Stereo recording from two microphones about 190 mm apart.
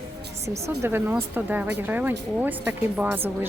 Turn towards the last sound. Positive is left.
turn(degrees=-10)  # may be behind; listen again after turning